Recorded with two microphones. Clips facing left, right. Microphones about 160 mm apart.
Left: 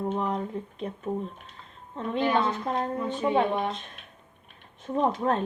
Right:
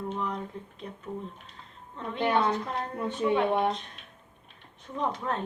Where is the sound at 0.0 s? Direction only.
50° left (ahead or behind).